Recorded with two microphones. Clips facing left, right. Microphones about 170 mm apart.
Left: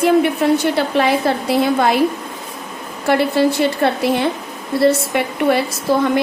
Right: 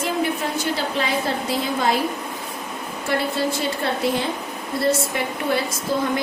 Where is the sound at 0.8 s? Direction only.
65° left (ahead or behind).